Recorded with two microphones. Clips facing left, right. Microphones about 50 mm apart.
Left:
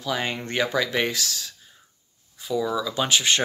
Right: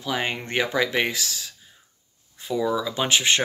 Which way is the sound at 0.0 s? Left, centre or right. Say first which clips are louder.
Even; centre.